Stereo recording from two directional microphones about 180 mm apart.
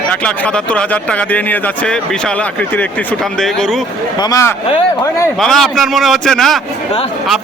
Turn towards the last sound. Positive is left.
turn(degrees=0)  # may be behind; listen again after turning